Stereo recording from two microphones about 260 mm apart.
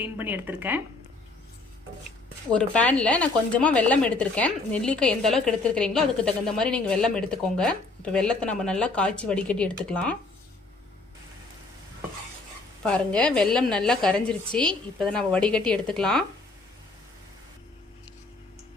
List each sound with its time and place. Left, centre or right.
0.0 s speech: centre
2.5 s speech: centre
12.8 s speech: centre